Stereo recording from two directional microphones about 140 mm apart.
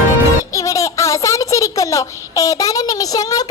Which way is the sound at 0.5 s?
25° left (ahead or behind).